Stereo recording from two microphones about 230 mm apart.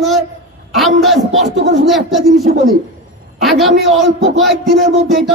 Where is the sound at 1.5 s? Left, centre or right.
Right.